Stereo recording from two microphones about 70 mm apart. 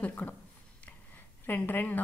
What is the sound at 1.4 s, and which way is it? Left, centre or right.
Speech, left.